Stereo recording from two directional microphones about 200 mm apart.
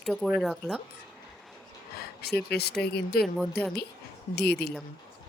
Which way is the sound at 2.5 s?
55° left (ahead or behind).